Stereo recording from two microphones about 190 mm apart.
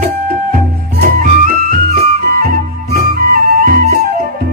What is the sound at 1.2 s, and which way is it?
Music, 50° right (ahead or behind).